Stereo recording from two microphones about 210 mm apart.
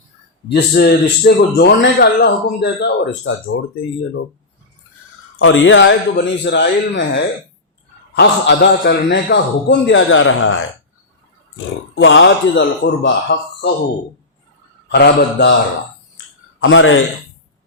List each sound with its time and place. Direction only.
0.4 s a man's voice: 50° left (ahead or behind)
5.4 s a man's voice: 65° left (ahead or behind)
12.0 s a man's voice: 60° left (ahead or behind)
14.8 s speech: 50° left (ahead or behind)
16.6 s speech: 65° left (ahead or behind)